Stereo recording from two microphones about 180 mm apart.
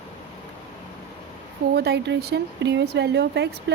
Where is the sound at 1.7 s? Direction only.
65° right (ahead or behind).